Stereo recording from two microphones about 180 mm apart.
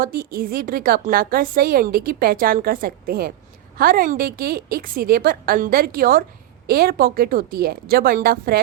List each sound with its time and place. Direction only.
0.0 s a woman's voice: 55° right (ahead or behind)